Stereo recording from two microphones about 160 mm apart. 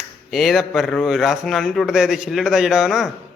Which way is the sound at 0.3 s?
Centre (ahead or behind).